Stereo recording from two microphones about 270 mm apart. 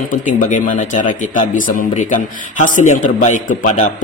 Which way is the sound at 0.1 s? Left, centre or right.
Left.